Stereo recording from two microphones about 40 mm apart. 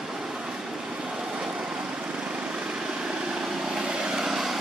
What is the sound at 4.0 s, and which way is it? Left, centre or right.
Vehicle, centre.